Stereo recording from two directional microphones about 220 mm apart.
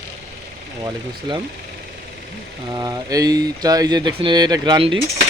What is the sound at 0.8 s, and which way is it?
Speech, 20° right (ahead or behind).